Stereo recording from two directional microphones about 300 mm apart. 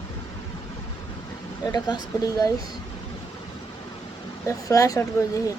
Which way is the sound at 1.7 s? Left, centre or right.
Centre.